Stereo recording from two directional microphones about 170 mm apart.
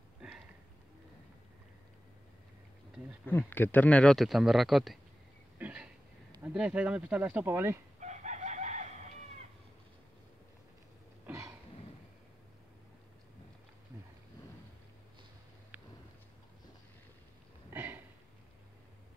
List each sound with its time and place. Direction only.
3.3 s speech: 10° left (ahead or behind)
5.6 s a sound: 10° right (ahead or behind)
6.4 s speech: 10° right (ahead or behind)
8.0 s chicken: 45° right (ahead or behind)
15.7 s a sound: 10° right (ahead or behind)
17.7 s sniff: 10° right (ahead or behind)